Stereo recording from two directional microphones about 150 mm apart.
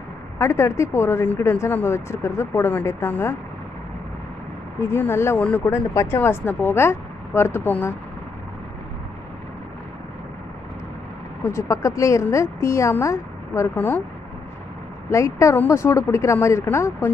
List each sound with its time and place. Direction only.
0.4 s speech: 15° left (ahead or behind)
4.7 s speech: 15° left (ahead or behind)
11.4 s speech: 20° left (ahead or behind)
15.0 s speech: 20° left (ahead or behind)